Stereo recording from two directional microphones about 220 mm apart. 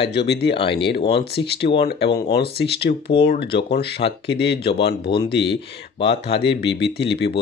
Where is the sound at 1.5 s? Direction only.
50° left (ahead or behind).